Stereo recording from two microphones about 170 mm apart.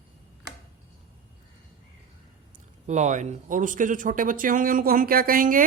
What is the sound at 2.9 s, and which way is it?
Speech, 45° right (ahead or behind).